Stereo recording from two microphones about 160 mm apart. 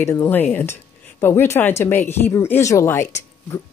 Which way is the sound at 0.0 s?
15° left (ahead or behind).